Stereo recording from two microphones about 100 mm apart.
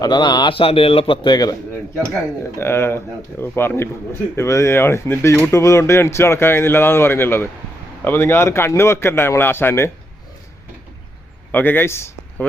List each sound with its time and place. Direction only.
0.0 s speech: 45° left (ahead or behind)
0.5 s a man's voice: 70° left (ahead or behind); by 1.5 s 45° left (ahead or behind)
2.6 s speech: 25° left (ahead or behind)
11.5 s speech: 20° left (ahead or behind)